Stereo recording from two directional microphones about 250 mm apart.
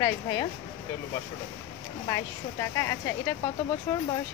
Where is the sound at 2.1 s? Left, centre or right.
Centre.